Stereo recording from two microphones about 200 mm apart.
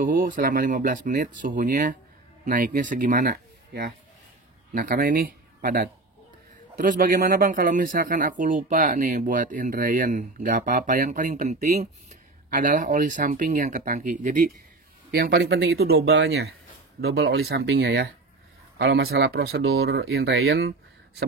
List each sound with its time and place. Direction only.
0.0 s speech: 45° right (ahead or behind)
15.1 s speech: 50° right (ahead or behind)